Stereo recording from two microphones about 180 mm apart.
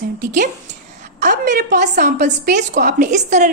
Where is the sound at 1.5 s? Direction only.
55° right (ahead or behind).